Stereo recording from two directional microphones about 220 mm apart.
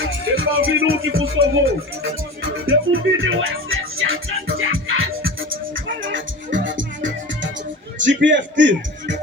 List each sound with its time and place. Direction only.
0.0 s music: 65° right (ahead or behind)
2.6 s music: 65° right (ahead or behind)
7.9 s speech: 55° right (ahead or behind)